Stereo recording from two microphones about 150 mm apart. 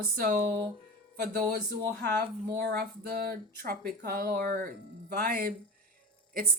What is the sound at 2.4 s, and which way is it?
Speech, 90° right.